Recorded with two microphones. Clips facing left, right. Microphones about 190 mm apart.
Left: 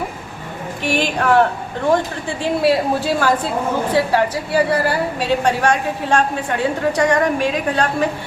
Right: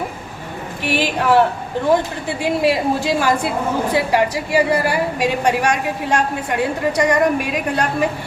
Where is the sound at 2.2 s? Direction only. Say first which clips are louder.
Even; 10° right (ahead or behind).